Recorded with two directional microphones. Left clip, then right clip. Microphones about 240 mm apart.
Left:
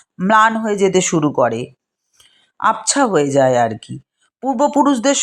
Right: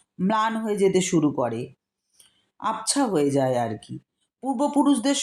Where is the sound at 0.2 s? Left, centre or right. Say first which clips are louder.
Left 11 dB; centre.